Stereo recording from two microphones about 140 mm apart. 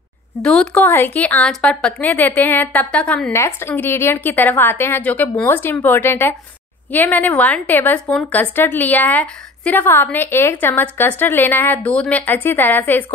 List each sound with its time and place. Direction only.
0.4 s a woman's voice: 5° left (ahead or behind)
3.3 s a woman's voice: 15° left (ahead or behind)